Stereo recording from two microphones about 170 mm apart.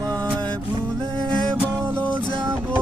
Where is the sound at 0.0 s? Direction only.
15° right (ahead or behind).